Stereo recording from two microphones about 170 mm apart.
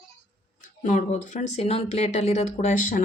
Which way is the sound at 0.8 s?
45° left (ahead or behind).